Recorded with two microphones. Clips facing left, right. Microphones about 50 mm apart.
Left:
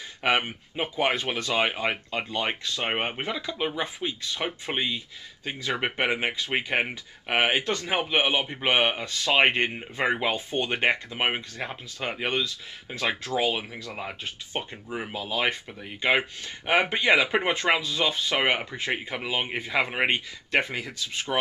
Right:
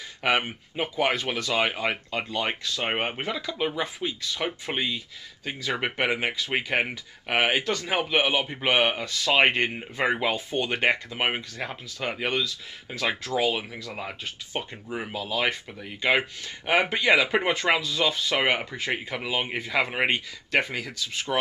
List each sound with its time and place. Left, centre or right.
0.2 s speech: centre
3.2 s speech: centre
9.0 s speech: centre
9.3 s speech: centre
15.1 s speech: centre
21.3 s speech: centre